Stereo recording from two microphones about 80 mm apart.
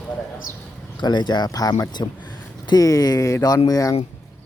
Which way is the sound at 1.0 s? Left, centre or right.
Left.